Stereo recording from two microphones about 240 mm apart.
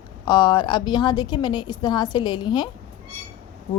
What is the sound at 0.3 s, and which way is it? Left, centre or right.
A woman's voice, centre.